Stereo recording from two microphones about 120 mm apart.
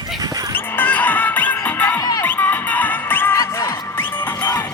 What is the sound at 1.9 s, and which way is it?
Music, 30° left (ahead or behind).